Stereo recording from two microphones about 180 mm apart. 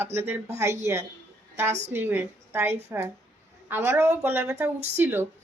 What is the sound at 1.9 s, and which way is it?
A woman's voice, 10° right (ahead or behind).